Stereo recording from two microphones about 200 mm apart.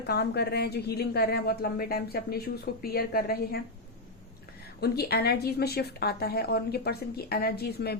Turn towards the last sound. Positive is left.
turn(degrees=50)  # may be behind; listen again after turning